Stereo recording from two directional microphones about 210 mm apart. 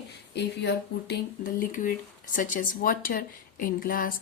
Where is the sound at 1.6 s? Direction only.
40° left (ahead or behind).